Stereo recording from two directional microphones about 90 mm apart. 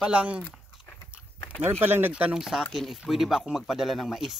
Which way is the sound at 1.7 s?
20° right (ahead or behind).